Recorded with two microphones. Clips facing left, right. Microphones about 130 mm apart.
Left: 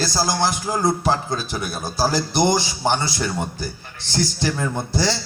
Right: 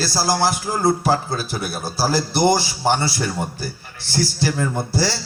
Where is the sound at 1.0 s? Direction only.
20° left (ahead or behind).